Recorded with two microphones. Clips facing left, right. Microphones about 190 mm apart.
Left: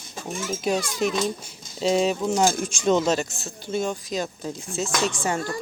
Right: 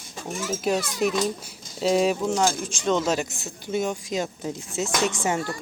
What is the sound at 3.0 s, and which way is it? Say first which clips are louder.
Speech: left 2 dB; 10° right (ahead or behind).